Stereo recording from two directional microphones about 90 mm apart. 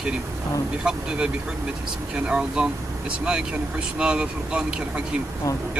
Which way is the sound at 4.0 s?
10° right (ahead or behind).